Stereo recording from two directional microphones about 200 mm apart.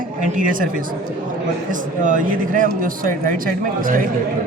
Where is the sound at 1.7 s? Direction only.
40° right (ahead or behind).